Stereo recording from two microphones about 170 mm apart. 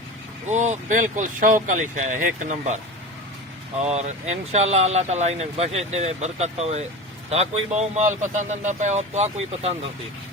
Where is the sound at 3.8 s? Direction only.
40° right (ahead or behind).